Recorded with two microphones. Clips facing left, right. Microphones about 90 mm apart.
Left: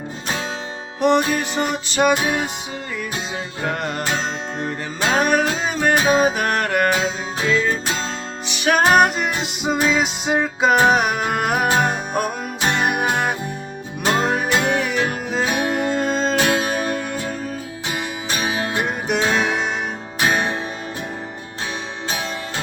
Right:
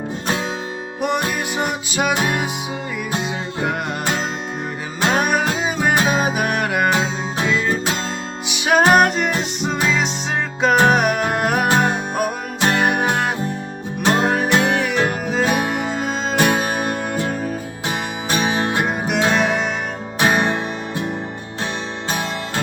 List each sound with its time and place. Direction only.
1.0 s music: 5° right (ahead or behind)
3.6 s music: 5° right (ahead or behind)
4.9 s music: 5° right (ahead or behind)
8.9 s music: centre (ahead or behind)
18.4 s music: 30° right (ahead or behind)
18.9 s music: centre (ahead or behind)